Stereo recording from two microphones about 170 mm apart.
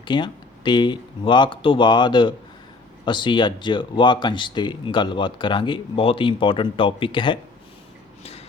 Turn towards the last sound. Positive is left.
turn(degrees=30)  # may be behind; listen again after turning